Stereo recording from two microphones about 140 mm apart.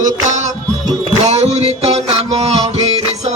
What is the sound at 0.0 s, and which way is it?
Music, 60° right (ahead or behind).